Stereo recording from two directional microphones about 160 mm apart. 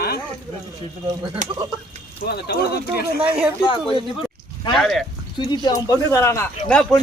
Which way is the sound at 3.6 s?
30° left (ahead or behind).